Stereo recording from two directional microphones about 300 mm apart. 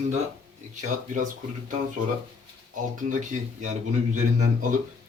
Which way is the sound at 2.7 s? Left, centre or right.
Right.